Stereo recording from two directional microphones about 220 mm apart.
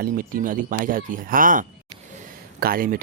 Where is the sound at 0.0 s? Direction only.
40° right (ahead or behind).